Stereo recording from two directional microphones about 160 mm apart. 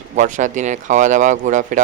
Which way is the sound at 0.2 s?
50° right (ahead or behind).